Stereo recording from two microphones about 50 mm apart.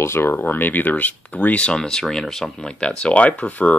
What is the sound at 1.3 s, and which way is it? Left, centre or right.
Speech, left.